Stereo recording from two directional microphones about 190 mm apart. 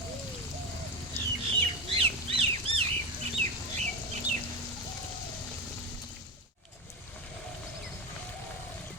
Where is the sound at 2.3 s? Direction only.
30° right (ahead or behind).